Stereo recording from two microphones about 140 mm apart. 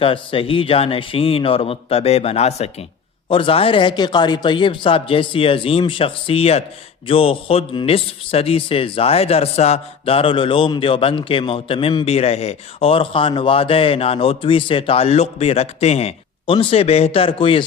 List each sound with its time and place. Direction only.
0.0 s speech: 40° left (ahead or behind)